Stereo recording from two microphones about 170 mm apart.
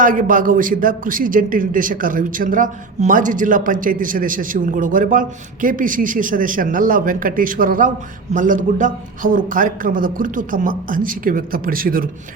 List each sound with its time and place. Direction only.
0.0 s a man's voice: 50° right (ahead or behind)